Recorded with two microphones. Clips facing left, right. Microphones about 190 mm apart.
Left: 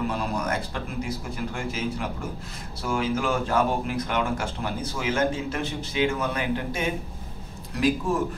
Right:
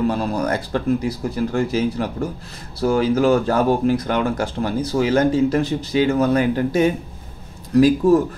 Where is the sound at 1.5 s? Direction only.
35° right (ahead or behind).